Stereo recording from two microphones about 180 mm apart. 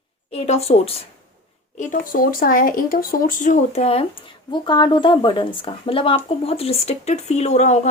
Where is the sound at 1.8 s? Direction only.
50° left (ahead or behind).